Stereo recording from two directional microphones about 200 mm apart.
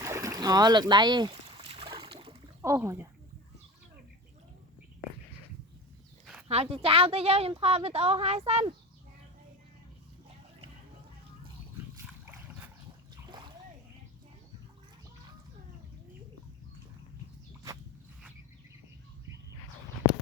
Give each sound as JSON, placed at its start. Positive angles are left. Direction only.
{"t": 0.0, "sound": "boat", "side_deg": -15}
{"t": 2.6, "sound": "speech", "side_deg": -15}
{"t": 6.5, "sound": "a woman's voice", "side_deg": -30}